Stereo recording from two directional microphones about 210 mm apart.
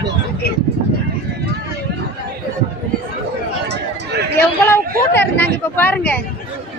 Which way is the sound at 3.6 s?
55° right (ahead or behind).